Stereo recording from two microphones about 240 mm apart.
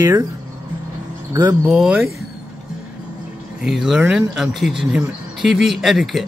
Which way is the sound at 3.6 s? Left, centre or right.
Centre.